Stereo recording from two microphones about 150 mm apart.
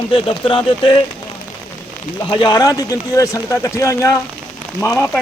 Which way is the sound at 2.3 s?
30° left (ahead or behind).